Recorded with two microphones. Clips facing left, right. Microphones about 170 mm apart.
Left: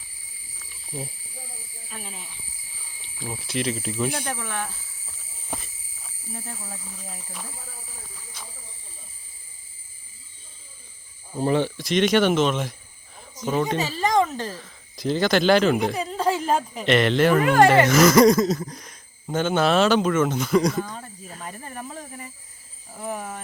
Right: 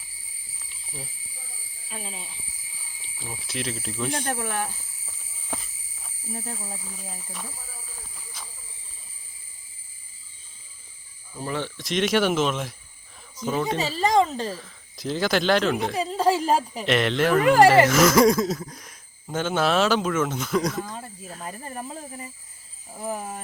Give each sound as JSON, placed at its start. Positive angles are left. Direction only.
{"t": 1.9, "sound": "speech", "side_deg": -20}
{"t": 3.2, "sound": "speech", "side_deg": 0}
{"t": 4.3, "sound": "speech", "side_deg": -50}
{"t": 8.4, "sound": "a sound", "side_deg": 0}
{"t": 11.3, "sound": "speech", "side_deg": 30}
{"t": 11.8, "sound": "speech", "side_deg": 0}
{"t": 16.0, "sound": "a sound", "side_deg": -30}
{"t": 16.2, "sound": "a sound", "side_deg": -5}
{"t": 16.6, "sound": "speech", "side_deg": -5}
{"t": 21.6, "sound": "speech", "side_deg": -25}